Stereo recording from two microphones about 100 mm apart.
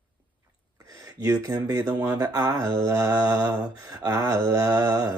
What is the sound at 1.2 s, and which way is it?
Speech, 40° right (ahead or behind).